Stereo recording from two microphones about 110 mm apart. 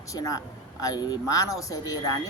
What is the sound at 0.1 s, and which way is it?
Speech, 35° left (ahead or behind).